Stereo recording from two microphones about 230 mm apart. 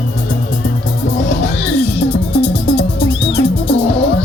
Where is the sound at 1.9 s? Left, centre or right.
Left.